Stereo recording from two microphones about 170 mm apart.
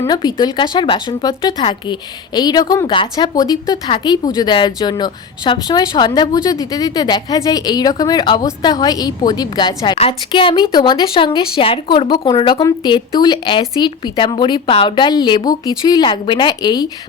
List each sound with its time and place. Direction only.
0.0 s speech: 25° left (ahead or behind)